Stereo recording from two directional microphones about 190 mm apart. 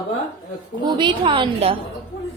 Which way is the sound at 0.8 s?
25° right (ahead or behind).